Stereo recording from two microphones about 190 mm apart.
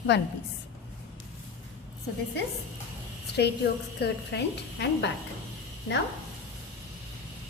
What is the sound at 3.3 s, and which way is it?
A woman's voice, 60° left (ahead or behind).